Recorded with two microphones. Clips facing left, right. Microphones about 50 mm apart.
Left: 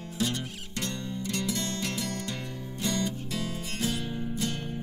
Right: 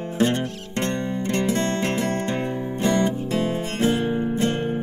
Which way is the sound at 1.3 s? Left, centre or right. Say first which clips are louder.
Right 10 dB; right.